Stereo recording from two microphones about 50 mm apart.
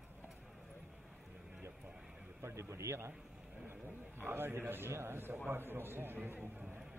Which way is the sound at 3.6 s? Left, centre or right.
Right.